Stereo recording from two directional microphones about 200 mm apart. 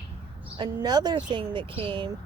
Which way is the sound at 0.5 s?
20° right (ahead or behind).